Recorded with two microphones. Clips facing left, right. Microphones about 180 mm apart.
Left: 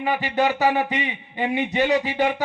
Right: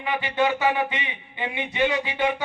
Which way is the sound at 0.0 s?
40° left (ahead or behind).